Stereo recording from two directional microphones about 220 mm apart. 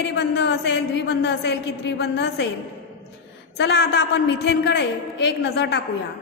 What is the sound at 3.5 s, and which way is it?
A woman's voice, 50° left (ahead or behind).